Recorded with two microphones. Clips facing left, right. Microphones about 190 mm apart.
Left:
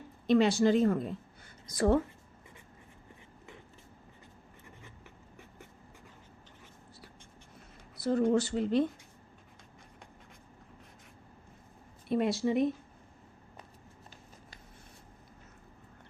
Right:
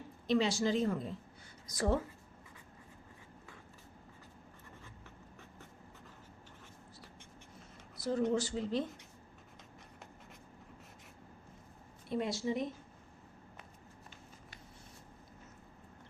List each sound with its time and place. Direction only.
0.3 s speech: 55° left (ahead or behind)
7.9 s speech: 60° left (ahead or behind)
12.0 s speech: 65° left (ahead or behind)